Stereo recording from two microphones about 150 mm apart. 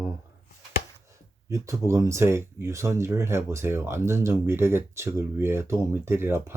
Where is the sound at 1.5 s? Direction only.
20° right (ahead or behind).